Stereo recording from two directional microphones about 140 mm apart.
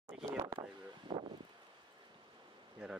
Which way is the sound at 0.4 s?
35° right (ahead or behind).